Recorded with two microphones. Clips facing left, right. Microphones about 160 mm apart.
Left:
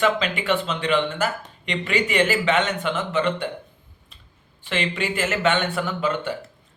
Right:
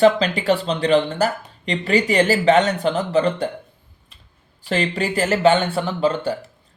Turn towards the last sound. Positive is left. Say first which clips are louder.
# right 4 dB
turn(degrees=-35)  # may be behind; listen again after turning